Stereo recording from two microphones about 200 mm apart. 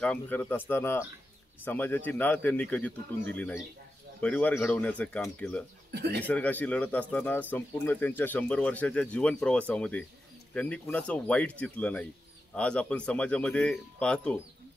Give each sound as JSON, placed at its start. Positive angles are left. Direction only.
{"t": 0.0, "sound": "speech", "side_deg": 5}
{"t": 5.9, "sound": "speech", "side_deg": -55}
{"t": 6.2, "sound": "speech", "side_deg": 5}